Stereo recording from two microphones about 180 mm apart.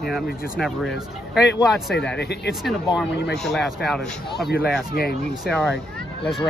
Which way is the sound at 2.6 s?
Centre (ahead or behind).